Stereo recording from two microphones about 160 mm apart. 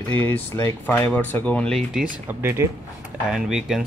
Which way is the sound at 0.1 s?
10° left (ahead or behind).